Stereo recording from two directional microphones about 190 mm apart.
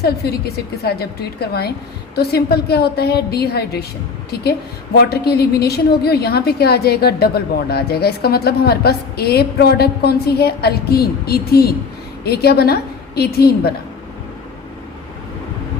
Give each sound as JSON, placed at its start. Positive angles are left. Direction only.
{"t": 0.0, "sound": "a woman's voice", "side_deg": 55}
{"t": 4.9, "sound": "a woman's voice", "side_deg": 55}